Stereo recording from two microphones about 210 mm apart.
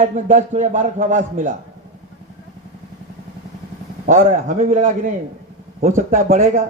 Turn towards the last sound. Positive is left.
turn(degrees=-40)  # may be behind; listen again after turning